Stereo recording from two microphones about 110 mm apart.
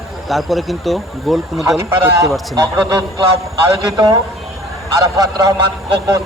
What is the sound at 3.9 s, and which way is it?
A man's voice, 30° right (ahead or behind).